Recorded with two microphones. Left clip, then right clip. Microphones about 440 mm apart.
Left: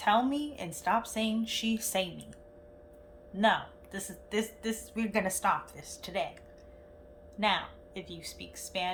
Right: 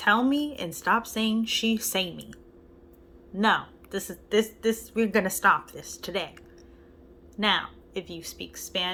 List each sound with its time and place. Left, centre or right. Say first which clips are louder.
0.0 s a woman's voice: right 4 dB; centre
3.9 s a woman's voice: right 9 dB; centre
7.3 s a woman's voice: right 4 dB; centre
7.9 s a woman's voice: right 8 dB; left
8.5 s a woman's voice: right 5 dB; centre